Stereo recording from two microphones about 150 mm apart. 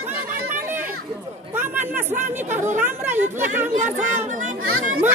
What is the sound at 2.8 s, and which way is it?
Speech, 15° right (ahead or behind).